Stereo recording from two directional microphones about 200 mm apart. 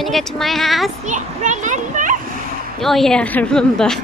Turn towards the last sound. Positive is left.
turn(degrees=5)  # may be behind; listen again after turning